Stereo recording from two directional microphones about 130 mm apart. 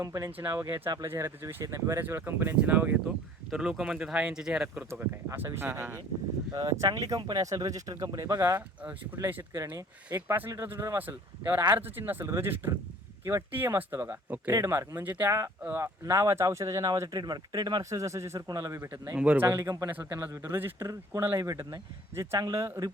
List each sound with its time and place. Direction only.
0.0 s speech: 25° right (ahead or behind); by 4.8 s 5° right (ahead or behind)
4.9 s speech: 20° right (ahead or behind)
6.5 s speech: 25° right (ahead or behind)
19.1 s speech: 10° right (ahead or behind)
19.5 s speech: 25° right (ahead or behind)